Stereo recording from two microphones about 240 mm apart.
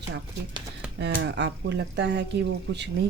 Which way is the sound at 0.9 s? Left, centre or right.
Right.